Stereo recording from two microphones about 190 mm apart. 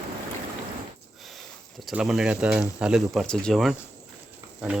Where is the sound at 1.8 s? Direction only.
Centre (ahead or behind).